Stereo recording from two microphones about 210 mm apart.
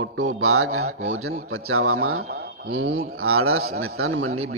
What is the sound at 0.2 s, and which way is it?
A man's voice, 90° right.